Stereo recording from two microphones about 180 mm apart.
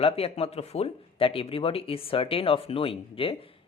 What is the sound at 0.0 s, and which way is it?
Speech, 35° left (ahead or behind).